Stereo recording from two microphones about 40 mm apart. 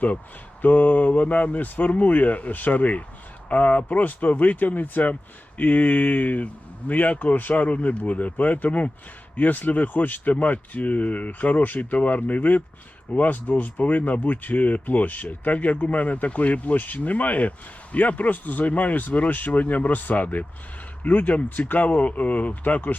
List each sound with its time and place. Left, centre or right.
0.6 s speech: left